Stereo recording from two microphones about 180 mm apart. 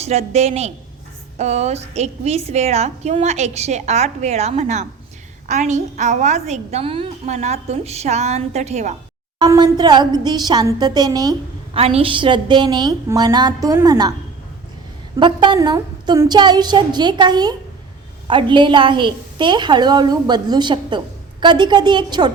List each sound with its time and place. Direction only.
0.0 s a woman's voice: 35° right (ahead or behind)
9.4 s a woman's voice: 25° right (ahead or behind)
11.8 s a woman's voice: 35° right (ahead or behind)
15.2 s a woman's voice: 25° right (ahead or behind)